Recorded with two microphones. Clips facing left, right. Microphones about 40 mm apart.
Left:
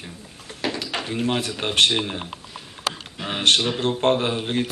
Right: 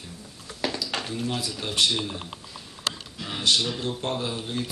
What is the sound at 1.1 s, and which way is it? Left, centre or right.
Speech, left.